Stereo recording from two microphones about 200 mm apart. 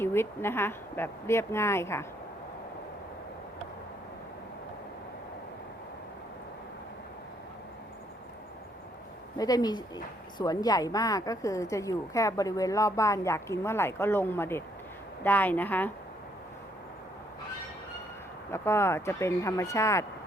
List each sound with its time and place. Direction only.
0.0 s a woman's voice: 10° left (ahead or behind)
9.4 s a woman's voice: 20° left (ahead or behind)
18.5 s a woman's voice: 10° left (ahead or behind)